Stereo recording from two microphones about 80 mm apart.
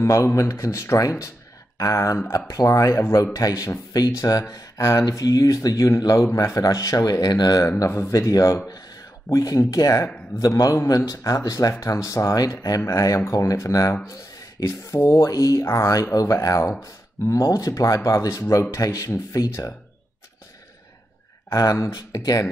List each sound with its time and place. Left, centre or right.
0.0 s speech: left
7.8 s speech: left
8.6 s a sound: left
9.6 s speech: left
12.6 s speech: left
21.5 s speech: left